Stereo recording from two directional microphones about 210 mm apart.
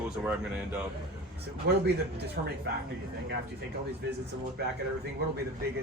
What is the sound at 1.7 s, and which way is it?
Speech, 50° right (ahead or behind).